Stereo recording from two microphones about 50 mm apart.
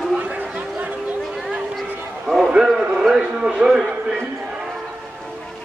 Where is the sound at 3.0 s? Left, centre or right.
Centre.